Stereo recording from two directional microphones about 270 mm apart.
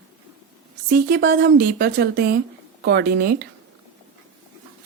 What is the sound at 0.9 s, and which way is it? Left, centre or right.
A woman's voice, right.